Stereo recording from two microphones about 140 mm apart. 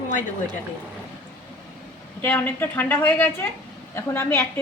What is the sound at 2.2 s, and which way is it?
A woman's voice, 15° left (ahead or behind).